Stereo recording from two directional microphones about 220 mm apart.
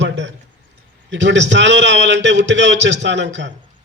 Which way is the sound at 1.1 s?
55° right (ahead or behind).